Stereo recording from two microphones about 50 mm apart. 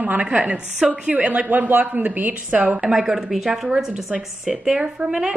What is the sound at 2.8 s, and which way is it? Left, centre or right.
A woman's voice, centre.